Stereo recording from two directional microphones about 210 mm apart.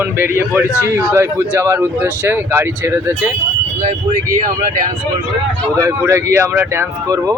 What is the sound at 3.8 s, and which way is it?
Speech, 40° right (ahead or behind).